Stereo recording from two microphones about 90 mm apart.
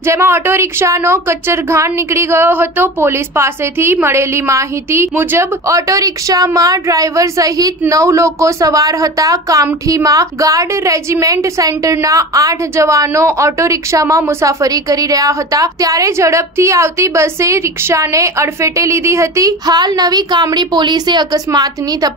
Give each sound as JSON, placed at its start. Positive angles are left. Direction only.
{"t": 0.0, "sound": "speech", "side_deg": -30}
{"t": 19.6, "sound": "a woman's voice", "side_deg": -50}